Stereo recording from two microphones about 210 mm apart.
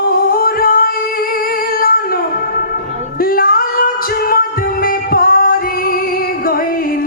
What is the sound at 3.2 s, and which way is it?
Music, 45° left (ahead or behind).